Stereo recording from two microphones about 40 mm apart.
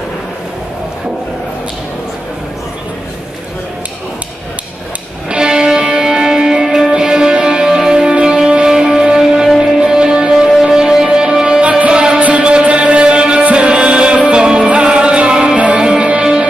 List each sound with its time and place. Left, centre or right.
5.3 s music: centre